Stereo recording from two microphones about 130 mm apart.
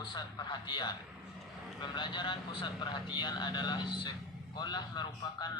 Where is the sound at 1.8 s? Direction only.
35° left (ahead or behind).